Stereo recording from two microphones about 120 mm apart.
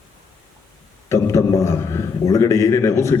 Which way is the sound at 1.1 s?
25° left (ahead or behind).